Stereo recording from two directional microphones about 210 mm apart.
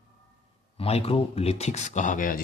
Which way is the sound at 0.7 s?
30° left (ahead or behind).